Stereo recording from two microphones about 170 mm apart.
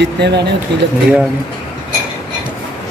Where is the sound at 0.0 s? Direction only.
80° right.